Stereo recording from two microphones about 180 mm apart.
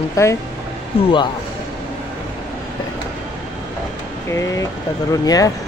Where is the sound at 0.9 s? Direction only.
30° left (ahead or behind).